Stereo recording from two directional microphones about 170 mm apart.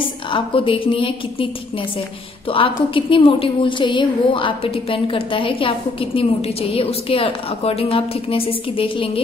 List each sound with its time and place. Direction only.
0.3 s a woman's voice: 30° left (ahead or behind)